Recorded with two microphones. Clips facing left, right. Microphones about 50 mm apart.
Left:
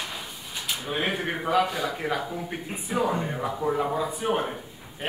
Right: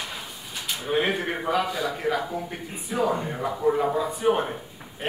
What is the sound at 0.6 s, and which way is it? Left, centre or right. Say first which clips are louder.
A man's voice: right 4 dB; centre.